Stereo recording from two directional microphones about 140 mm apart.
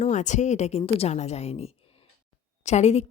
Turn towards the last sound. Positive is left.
turn(degrees=50)  # may be behind; listen again after turning